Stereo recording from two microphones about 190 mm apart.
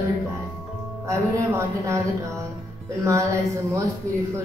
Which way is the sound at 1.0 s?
15° right (ahead or behind).